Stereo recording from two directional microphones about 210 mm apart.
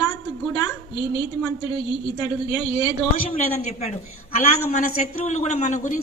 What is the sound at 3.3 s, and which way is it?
Speech, 30° left (ahead or behind).